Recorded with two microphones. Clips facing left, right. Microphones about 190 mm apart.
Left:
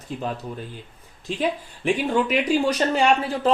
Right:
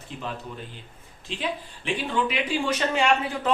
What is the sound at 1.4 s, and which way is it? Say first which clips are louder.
Speech: left 6 dB; 45° left (ahead or behind).